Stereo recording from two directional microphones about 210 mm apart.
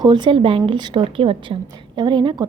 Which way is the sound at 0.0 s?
20° right (ahead or behind).